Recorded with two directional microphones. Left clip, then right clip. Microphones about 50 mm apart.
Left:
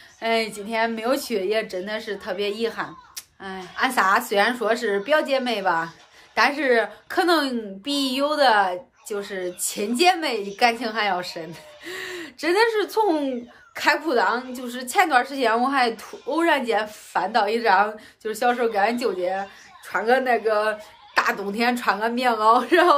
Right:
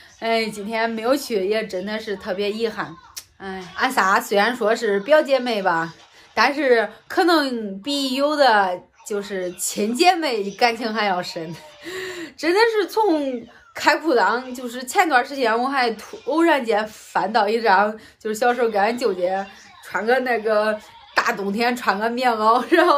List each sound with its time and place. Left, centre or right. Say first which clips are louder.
0.2 s a woman's voice: right 2 dB; left
3.7 s a woman's voice: right 1 dB; centre
12.2 s a woman's voice: right 2 dB; left
13.7 s a woman's voice: right 3 dB; centre
15.0 s a woman's voice: right 1 dB; left
16.3 s a woman's voice: right 3 dB; left
19.9 s a child's voice: even; left